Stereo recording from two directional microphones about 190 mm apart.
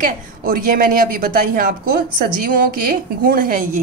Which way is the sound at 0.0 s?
50° right (ahead or behind).